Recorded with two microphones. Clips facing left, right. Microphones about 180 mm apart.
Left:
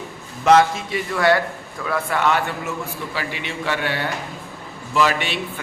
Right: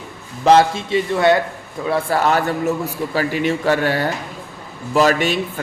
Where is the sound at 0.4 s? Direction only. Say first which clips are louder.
Right 2 dB; 30° right (ahead or behind).